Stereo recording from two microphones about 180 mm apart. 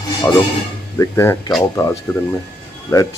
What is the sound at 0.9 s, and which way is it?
Speech, 15° left (ahead or behind).